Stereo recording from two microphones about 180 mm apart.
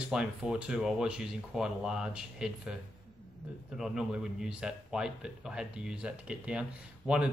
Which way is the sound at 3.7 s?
5° right (ahead or behind).